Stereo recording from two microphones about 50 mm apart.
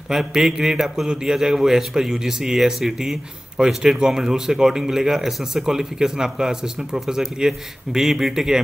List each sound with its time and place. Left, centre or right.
0.1 s speech: centre